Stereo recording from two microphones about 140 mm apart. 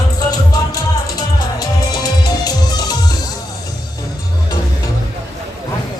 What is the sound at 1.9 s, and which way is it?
Music, 30° left (ahead or behind).